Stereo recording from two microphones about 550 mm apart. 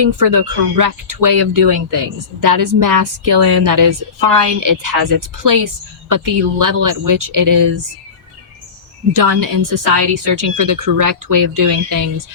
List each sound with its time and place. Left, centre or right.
0.2 s a woman's voice: right
9.1 s a woman's voice: right